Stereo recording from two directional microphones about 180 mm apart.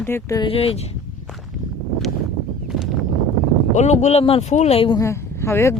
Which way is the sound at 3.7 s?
40° left (ahead or behind).